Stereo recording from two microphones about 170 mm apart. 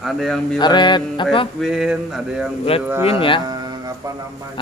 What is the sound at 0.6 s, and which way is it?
Speech, 25° left (ahead or behind).